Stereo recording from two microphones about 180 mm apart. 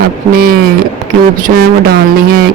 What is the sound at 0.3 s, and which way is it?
Speech, 55° right (ahead or behind).